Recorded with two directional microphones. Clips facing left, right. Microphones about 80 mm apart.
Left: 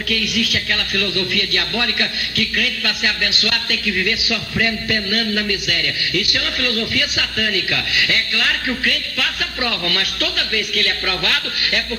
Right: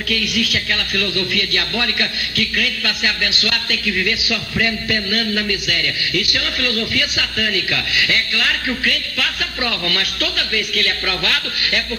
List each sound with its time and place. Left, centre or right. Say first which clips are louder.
0.1 s a man's voice: even; left